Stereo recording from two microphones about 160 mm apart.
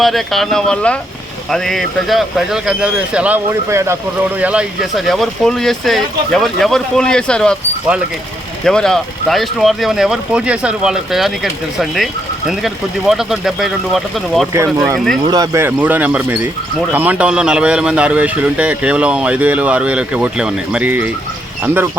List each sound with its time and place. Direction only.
0.0 s speech: centre (ahead or behind)
8.6 s speech: 5° left (ahead or behind)
15.3 s speech: 25° right (ahead or behind)
15.6 s speech: 10° right (ahead or behind)